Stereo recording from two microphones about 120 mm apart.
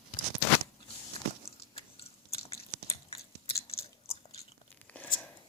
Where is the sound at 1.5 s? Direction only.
55° left (ahead or behind).